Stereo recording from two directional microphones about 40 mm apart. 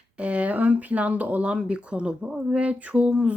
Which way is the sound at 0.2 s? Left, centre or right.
Right.